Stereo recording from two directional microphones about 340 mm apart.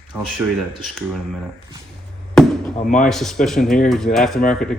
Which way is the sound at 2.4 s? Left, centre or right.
Centre.